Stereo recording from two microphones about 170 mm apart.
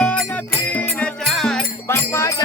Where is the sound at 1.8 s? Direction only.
15° left (ahead or behind).